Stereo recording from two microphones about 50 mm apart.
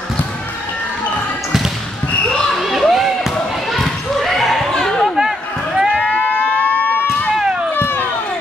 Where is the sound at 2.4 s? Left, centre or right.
Centre.